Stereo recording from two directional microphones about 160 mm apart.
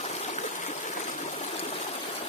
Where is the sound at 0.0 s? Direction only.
45° left (ahead or behind).